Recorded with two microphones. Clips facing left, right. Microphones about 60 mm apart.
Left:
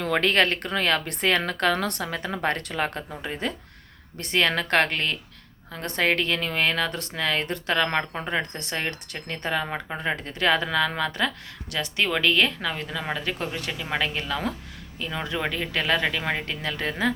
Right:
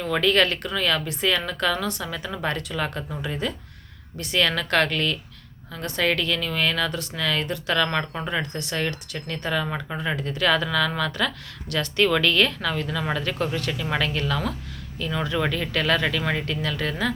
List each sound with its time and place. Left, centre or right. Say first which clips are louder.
0.0 s a woman's voice: right 1 dB; left
8.4 s speech: right 3 dB; left